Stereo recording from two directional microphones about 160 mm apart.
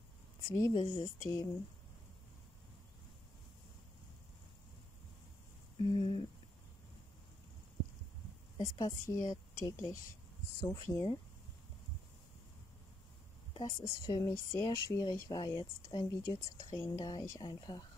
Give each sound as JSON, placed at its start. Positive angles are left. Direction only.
{"t": 0.5, "sound": "speech", "side_deg": 25}
{"t": 5.8, "sound": "speech", "side_deg": 35}
{"t": 8.5, "sound": "speech", "side_deg": 25}
{"t": 13.6, "sound": "speech", "side_deg": 20}